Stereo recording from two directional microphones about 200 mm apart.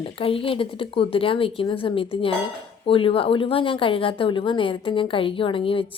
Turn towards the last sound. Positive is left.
turn(degrees=25)  # may be behind; listen again after turning